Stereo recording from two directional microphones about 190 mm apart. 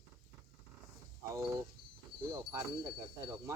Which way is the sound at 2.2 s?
15° right (ahead or behind).